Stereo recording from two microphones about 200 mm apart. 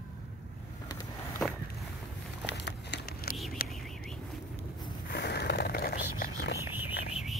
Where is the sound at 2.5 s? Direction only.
60° left (ahead or behind).